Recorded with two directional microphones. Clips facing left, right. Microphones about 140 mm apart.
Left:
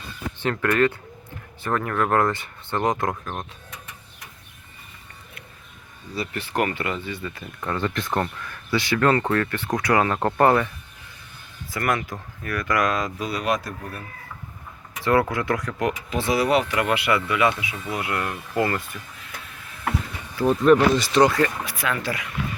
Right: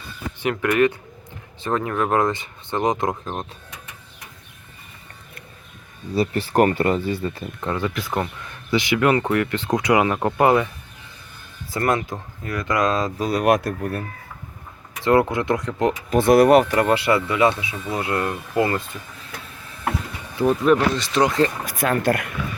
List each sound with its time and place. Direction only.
0.3 s speech: 15° right (ahead or behind)
6.1 s speech: 35° right (ahead or behind)
7.8 s speech: 5° right (ahead or behind)
8.4 s speech: 15° right (ahead or behind)
11.7 s speech: 30° right (ahead or behind)
13.4 s speech: 55° right (ahead or behind)
15.0 s speech: 20° right (ahead or behind)
16.0 s speech: 50° right (ahead or behind); by 18.9 s 20° right (ahead or behind)
20.3 s speech: 15° right (ahead or behind)
20.6 s speech: 5° left (ahead or behind)
21.2 s speech: 25° right (ahead or behind)
21.6 s speech: 45° right (ahead or behind)